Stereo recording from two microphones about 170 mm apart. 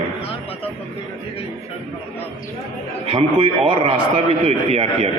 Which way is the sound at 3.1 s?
35° right (ahead or behind).